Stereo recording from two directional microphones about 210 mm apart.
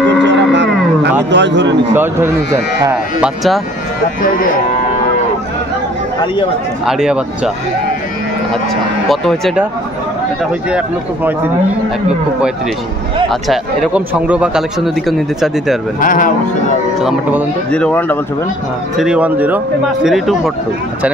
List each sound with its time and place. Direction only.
0.2 s wild animals: 55° right (ahead or behind)
1.3 s speech: 60° right (ahead or behind)
2.0 s speech: 10° right (ahead or behind)
6.9 s speech: 5° right (ahead or behind)
9.1 s speech: centre (ahead or behind)
13.3 s speech: 5° right (ahead or behind)
16.0 s speech: 40° left (ahead or behind)
17.6 s speech: 5° left (ahead or behind)
18.9 s speech: 5° right (ahead or behind)